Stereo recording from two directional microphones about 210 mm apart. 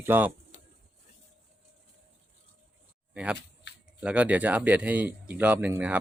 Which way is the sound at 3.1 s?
5° right (ahead or behind).